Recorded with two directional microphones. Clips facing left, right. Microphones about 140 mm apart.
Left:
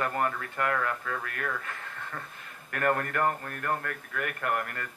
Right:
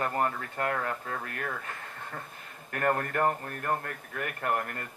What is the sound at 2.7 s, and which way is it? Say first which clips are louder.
Speech: left 1 dB; 30° right (ahead or behind).